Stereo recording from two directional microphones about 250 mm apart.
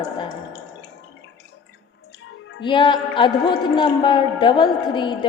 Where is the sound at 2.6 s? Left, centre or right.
Centre.